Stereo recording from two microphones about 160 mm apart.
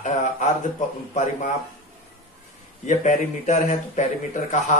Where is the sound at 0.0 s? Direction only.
50° left (ahead or behind).